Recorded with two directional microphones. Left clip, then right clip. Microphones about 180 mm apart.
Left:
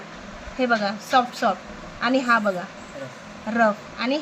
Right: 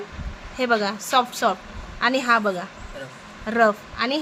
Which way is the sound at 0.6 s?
50° right (ahead or behind).